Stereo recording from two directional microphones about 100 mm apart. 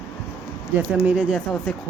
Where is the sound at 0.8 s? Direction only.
15° right (ahead or behind).